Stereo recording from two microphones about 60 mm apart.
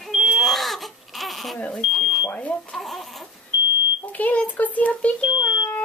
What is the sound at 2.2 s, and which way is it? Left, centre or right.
Smoke detector, left.